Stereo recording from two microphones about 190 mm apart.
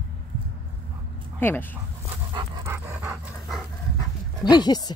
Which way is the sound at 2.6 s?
10° right (ahead or behind).